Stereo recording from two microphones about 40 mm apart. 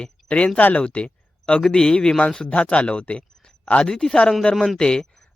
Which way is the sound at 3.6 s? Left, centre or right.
Left.